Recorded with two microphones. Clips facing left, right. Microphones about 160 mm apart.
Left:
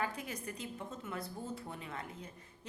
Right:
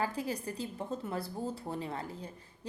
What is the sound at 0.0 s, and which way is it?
A woman's voice, 30° right (ahead or behind).